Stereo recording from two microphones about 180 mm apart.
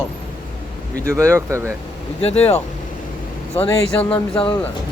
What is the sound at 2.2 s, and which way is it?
Speech, 35° left (ahead or behind).